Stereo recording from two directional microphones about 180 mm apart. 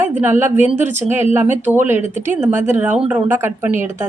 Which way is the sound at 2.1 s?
45° right (ahead or behind).